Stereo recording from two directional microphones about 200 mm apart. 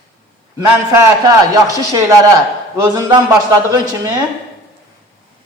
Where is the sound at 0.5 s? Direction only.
15° right (ahead or behind).